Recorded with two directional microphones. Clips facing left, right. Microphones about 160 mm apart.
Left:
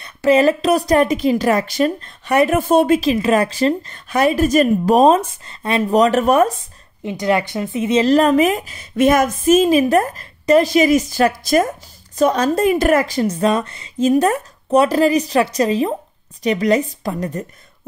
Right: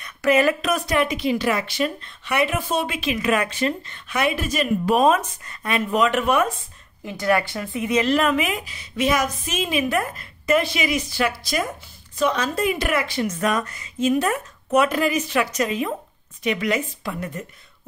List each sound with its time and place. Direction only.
0.0 s speech: 30° left (ahead or behind)
7.1 s speech: 20° left (ahead or behind)
8.0 s a woman's voice: 35° left (ahead or behind)